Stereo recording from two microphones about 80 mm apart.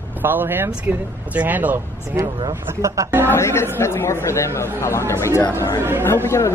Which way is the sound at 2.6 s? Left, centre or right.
Right.